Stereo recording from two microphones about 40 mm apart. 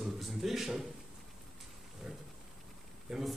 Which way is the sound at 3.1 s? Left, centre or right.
Centre.